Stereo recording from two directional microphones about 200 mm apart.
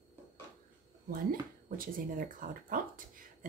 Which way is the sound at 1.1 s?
45° right (ahead or behind).